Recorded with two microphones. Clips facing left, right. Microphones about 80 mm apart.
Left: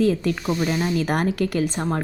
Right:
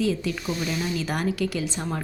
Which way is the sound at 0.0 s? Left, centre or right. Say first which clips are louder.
Left 5 dB; left.